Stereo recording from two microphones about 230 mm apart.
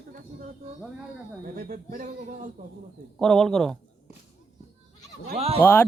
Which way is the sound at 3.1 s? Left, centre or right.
Centre.